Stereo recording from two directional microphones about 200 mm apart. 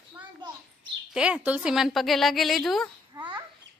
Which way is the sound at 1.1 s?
5° right (ahead or behind).